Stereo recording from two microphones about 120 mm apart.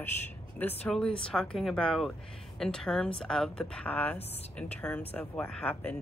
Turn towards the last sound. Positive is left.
turn(degrees=10)  # may be behind; listen again after turning